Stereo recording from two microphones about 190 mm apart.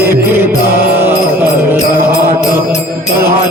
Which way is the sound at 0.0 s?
10° right (ahead or behind).